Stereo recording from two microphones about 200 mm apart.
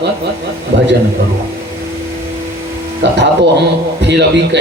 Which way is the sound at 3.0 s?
60° right (ahead or behind).